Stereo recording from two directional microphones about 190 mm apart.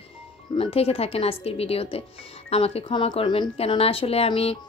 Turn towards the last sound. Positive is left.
turn(degrees=30)  # may be behind; listen again after turning